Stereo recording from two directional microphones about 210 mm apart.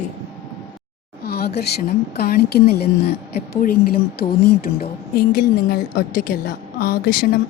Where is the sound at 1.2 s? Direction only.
50° left (ahead or behind).